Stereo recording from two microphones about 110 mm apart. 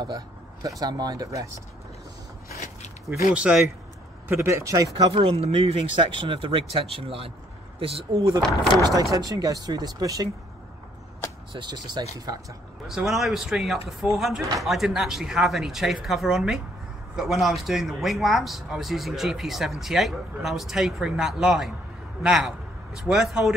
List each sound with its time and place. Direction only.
0.0 s speech: 35° right (ahead or behind)
3.1 s a man's voice: 5° right (ahead or behind)
4.3 s speech: 20° right (ahead or behind)
5.1 s speech: 60° right (ahead or behind)
8.8 s speech: 35° right (ahead or behind)
11.5 s speech: 40° right (ahead or behind)
12.8 s a man's voice: 5° right (ahead or behind)